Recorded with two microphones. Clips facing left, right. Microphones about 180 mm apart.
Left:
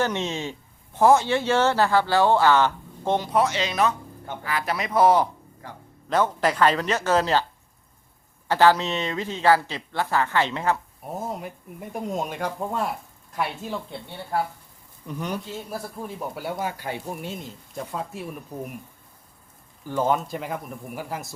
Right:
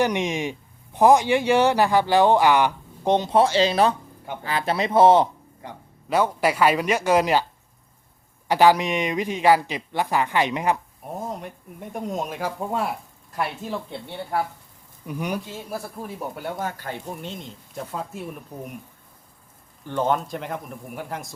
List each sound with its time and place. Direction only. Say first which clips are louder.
0.0 s speech: right 3 dB; 15° right (ahead or behind)
6.1 s speech: right 1 dB; 10° right (ahead or behind)
8.4 s speech: right 2 dB; 15° right (ahead or behind)
11.0 s speech: even; 5° left (ahead or behind)
15.0 s speech: right 2 dB; 10° right (ahead or behind)
16.4 s speech: left 2 dB; 10° left (ahead or behind)
19.8 s speech: even; 5° left (ahead or behind)